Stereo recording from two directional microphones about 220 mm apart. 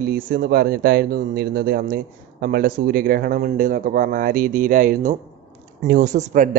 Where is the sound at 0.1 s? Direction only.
45° right (ahead or behind).